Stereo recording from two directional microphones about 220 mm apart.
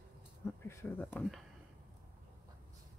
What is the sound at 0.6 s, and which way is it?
Speech, 10° left (ahead or behind).